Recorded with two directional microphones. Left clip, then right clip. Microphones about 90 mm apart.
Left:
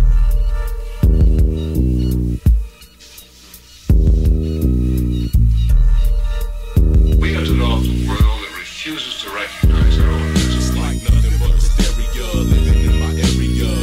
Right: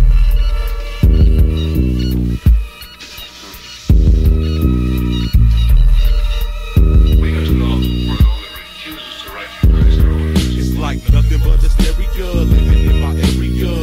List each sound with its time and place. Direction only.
1.0 s music: 35° right (ahead or behind)
3.8 s music: 30° right (ahead or behind)
6.7 s music: 35° right (ahead or behind)
12.2 s music: 30° right (ahead or behind)